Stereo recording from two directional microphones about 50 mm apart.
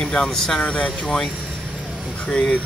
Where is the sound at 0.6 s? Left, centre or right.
Left.